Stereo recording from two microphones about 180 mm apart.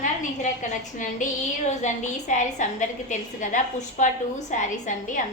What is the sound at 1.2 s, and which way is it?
A woman's voice, 45° left (ahead or behind).